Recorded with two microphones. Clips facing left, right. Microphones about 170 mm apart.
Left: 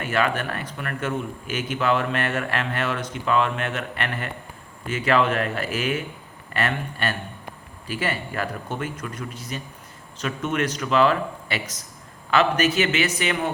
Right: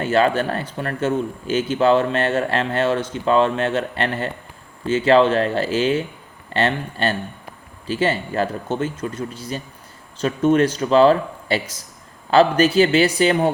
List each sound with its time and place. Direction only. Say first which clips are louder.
0.0 s a man's voice: right 6 dB; 30° right (ahead or behind)